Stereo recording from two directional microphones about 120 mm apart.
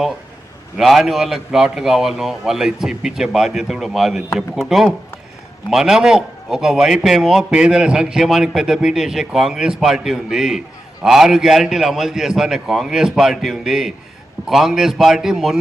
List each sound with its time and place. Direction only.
0.8 s a man's voice: centre (ahead or behind)